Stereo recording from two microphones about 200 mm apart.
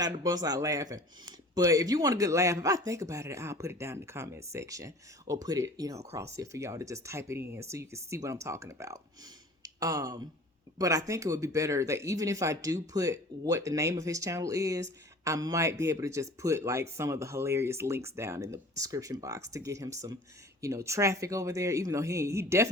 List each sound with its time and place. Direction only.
0.0 s speech: 20° right (ahead or behind)